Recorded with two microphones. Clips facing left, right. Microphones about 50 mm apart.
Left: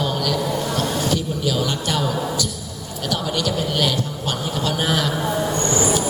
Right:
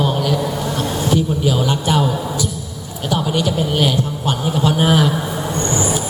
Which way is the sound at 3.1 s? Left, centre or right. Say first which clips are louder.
Right 4 dB; right.